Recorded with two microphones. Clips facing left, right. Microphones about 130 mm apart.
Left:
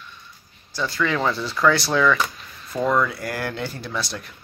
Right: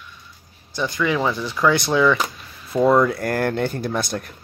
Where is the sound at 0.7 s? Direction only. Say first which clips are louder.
Right 2 dB; 15° right (ahead or behind).